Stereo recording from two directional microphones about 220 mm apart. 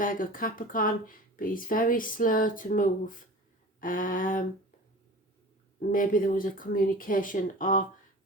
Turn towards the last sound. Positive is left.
turn(degrees=35)  # may be behind; listen again after turning